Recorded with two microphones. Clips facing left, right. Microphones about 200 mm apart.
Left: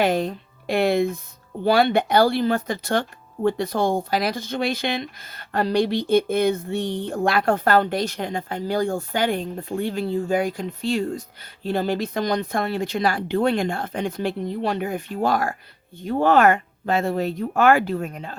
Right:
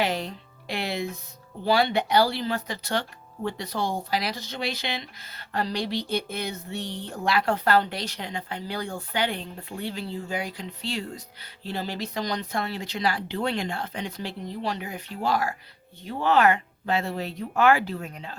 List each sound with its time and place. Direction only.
0.0 s speech: 50° left (ahead or behind)